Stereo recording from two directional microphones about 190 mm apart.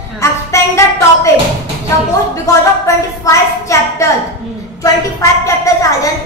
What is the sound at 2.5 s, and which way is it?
A child's voice, 15° left (ahead or behind).